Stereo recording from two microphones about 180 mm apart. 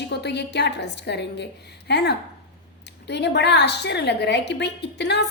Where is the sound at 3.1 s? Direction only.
70° left (ahead or behind).